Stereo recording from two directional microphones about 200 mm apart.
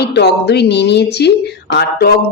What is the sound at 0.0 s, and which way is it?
Speech, 55° left (ahead or behind).